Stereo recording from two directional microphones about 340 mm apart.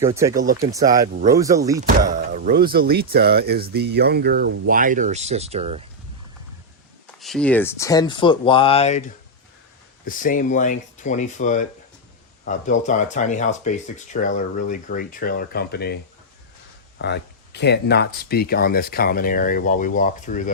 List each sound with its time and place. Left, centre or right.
0.0 s speech: centre
2.0 s speech: right
7.2 s speech: centre
10.1 s speech: left
17.0 s speech: left